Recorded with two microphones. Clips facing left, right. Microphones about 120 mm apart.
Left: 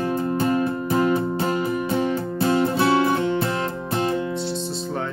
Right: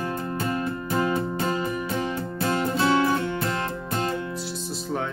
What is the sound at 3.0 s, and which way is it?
Music, 20° left (ahead or behind).